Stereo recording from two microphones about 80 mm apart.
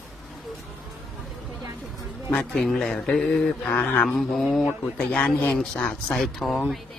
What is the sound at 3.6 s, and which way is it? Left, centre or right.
Mantra, left.